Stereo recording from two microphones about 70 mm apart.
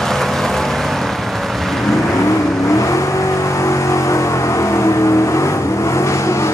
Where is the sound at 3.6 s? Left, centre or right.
Left.